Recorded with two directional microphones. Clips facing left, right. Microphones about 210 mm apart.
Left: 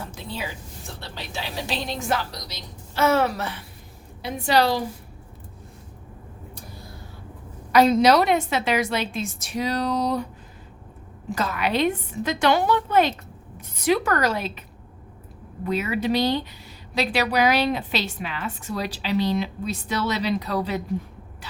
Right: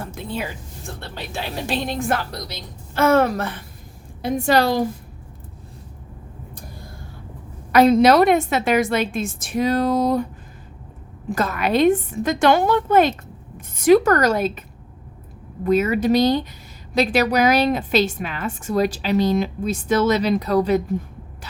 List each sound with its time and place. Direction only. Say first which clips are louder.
0.0 s a sound: right 6 dB; 55° right (ahead or behind)
0.9 s a woman's voice: right 5 dB; 55° right (ahead or behind)
7.7 s a woman's voice: right 3 dB; 55° right (ahead or behind)
11.3 s a woman's voice: right 4 dB; 50° right (ahead or behind)
15.6 s a woman's voice: right 7 dB; 45° right (ahead or behind)